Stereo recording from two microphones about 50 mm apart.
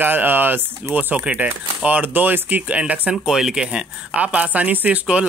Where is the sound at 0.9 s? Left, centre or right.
Right.